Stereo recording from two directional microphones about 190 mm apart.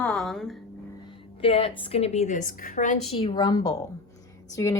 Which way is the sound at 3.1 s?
30° left (ahead or behind).